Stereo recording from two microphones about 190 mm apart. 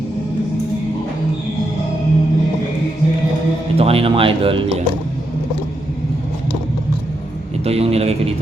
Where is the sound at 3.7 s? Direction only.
30° right (ahead or behind).